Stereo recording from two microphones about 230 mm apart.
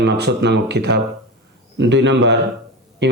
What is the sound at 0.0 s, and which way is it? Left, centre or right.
Speech, right.